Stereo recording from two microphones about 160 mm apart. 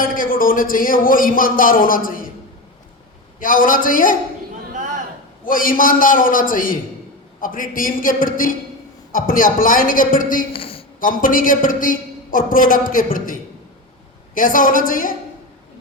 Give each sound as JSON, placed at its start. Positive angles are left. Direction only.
{"t": 0.0, "sound": "speech", "side_deg": 60}
{"t": 3.4, "sound": "a man's voice", "side_deg": 60}
{"t": 5.5, "sound": "a man's voice", "side_deg": 60}
{"t": 10.5, "sound": "a sound", "side_deg": 35}
{"t": 11.0, "sound": "a man's voice", "side_deg": 60}